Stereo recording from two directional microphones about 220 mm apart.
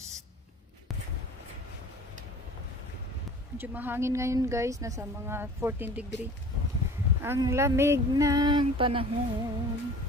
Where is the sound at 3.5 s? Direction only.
10° right (ahead or behind).